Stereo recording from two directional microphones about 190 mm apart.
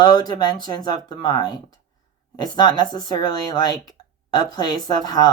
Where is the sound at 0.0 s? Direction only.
20° left (ahead or behind).